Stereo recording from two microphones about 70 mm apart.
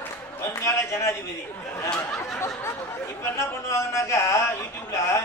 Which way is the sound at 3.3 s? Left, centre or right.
Left.